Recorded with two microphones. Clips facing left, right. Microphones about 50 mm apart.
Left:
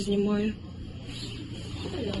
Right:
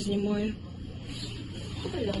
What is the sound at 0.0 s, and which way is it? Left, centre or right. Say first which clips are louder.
Speech: left 3 dB; left.